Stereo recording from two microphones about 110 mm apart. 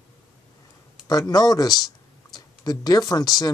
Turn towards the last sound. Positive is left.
turn(degrees=35)  # may be behind; listen again after turning